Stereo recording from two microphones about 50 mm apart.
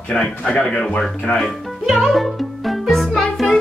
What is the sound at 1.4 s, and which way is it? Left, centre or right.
Speech, centre.